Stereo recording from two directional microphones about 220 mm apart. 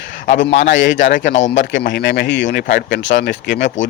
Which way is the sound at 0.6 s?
55° left (ahead or behind).